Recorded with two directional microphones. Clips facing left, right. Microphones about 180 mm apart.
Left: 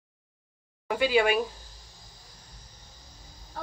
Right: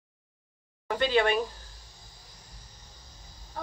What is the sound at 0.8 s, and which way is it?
Speech, 10° left (ahead or behind).